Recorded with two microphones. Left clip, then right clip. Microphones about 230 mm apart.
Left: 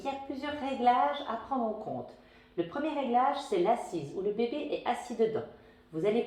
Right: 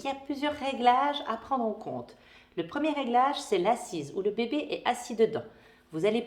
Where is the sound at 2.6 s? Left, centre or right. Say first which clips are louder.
Right 4 dB; right.